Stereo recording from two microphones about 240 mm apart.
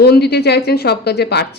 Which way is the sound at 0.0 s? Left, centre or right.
Left.